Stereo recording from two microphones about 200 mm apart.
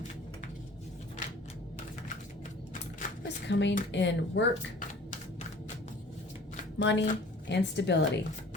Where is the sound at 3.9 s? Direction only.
65° left (ahead or behind).